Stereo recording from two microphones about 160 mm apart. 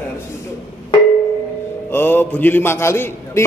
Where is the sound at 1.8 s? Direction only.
15° left (ahead or behind).